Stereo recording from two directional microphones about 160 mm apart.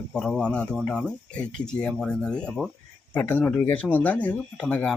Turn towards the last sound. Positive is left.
turn(degrees=10)  # may be behind; listen again after turning